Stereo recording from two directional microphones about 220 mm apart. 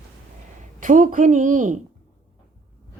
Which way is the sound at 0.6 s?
35° right (ahead or behind).